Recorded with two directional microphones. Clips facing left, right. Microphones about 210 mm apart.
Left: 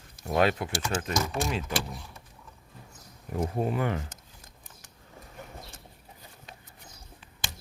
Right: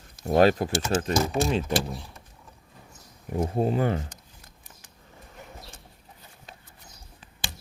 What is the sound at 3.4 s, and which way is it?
Speech, 30° right (ahead or behind).